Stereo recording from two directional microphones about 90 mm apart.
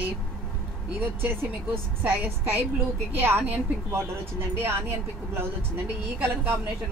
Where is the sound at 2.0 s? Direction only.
20° right (ahead or behind).